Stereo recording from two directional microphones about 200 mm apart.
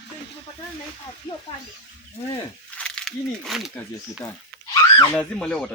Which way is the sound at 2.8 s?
5° left (ahead or behind).